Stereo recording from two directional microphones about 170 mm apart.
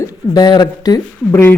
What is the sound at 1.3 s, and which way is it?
Speech, 15° left (ahead or behind).